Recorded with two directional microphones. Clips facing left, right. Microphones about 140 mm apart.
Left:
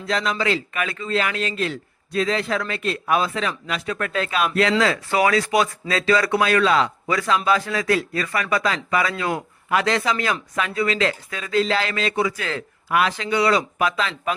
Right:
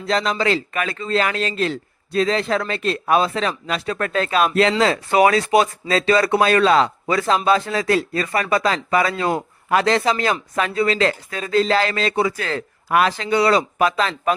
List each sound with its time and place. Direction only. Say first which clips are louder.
0.1 s speech: right 3 dB; 35° right (ahead or behind)